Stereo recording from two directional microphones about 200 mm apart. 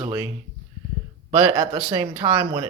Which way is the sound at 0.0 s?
15° right (ahead or behind).